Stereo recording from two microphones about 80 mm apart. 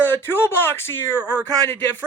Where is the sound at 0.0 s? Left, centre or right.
Left.